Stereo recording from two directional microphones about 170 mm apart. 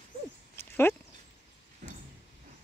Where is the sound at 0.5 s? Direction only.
15° left (ahead or behind).